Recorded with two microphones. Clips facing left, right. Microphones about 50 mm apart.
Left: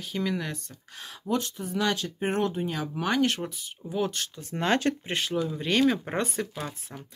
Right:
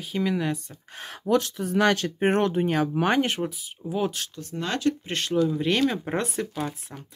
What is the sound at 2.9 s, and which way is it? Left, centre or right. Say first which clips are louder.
Speech: right 3 dB; right.